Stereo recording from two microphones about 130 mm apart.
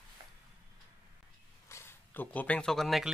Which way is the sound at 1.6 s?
20° left (ahead or behind).